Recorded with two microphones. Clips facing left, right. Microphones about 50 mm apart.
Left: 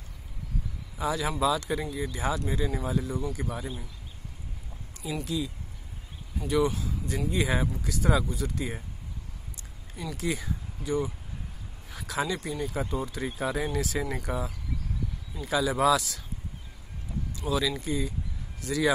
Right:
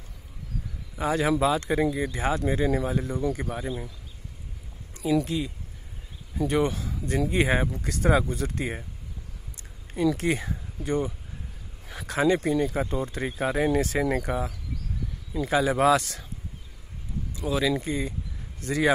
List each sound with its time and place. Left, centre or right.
0.9 s speech: right
1.8 s speech: right
4.9 s speech: right
9.9 s speech: right
12.1 s speech: right
15.4 s speech: right
17.4 s speech: right